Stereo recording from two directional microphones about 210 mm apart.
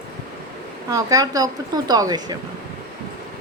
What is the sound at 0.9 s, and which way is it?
Speech, 15° right (ahead or behind).